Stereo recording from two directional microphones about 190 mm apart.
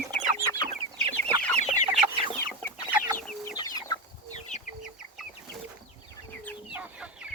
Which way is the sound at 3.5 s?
20° left (ahead or behind).